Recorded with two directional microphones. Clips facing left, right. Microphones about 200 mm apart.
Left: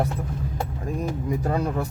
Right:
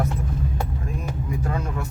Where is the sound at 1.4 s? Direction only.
35° left (ahead or behind).